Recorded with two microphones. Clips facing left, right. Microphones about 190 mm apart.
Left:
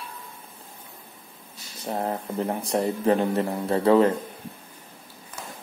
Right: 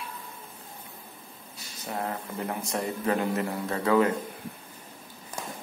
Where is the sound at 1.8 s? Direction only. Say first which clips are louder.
Left 5 dB; 30° left (ahead or behind).